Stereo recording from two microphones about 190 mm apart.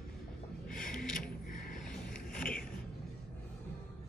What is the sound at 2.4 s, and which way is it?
Vehicle, 45° left (ahead or behind).